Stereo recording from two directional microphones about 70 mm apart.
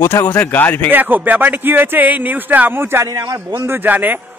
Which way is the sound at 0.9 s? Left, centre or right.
Right.